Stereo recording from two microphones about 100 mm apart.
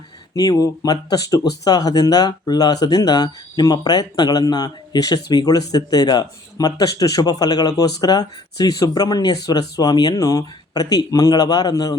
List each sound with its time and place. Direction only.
0.3 s speech: 35° left (ahead or behind)